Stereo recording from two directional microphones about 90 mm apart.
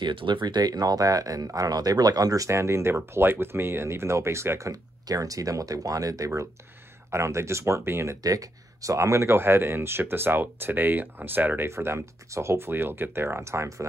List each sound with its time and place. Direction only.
0.0 s speech: 65° right (ahead or behind); by 8.2 s 30° right (ahead or behind)
8.2 s speech: 40° right (ahead or behind)